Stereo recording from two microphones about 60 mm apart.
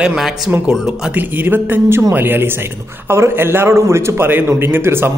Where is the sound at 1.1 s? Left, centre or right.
Right.